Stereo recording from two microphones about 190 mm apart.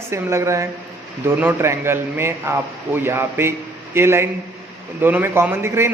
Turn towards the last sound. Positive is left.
turn(degrees=-15)  # may be behind; listen again after turning